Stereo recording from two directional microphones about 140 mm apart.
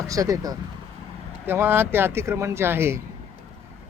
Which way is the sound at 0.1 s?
25° right (ahead or behind).